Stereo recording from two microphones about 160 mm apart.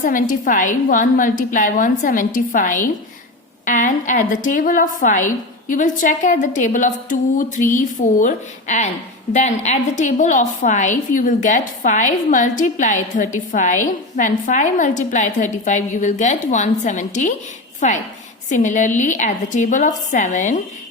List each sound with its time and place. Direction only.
0.0 s a woman's voice: 55° left (ahead or behind)
18.4 s a woman's voice: 50° left (ahead or behind)